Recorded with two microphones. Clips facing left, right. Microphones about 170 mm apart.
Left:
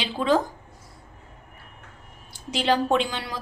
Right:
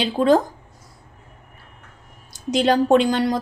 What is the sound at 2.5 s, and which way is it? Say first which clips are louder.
Speech: right 6 dB; 45° right (ahead or behind).